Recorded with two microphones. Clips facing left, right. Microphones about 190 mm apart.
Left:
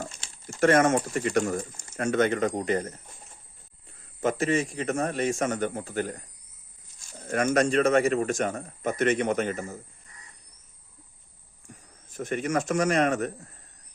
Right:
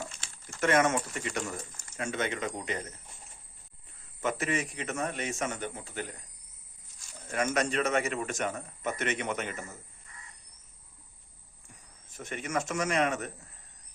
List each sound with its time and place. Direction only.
0.0 s a sound: 40° left (ahead or behind)
0.6 s speech: 45° left (ahead or behind)
4.2 s a man's voice: 35° left (ahead or behind)
7.3 s speech: 45° left (ahead or behind)
7.9 s a man's voice: 35° left (ahead or behind)
12.2 s a man's voice: 35° left (ahead or behind)
12.5 s speech: 55° left (ahead or behind)
12.8 s speech: 45° left (ahead or behind)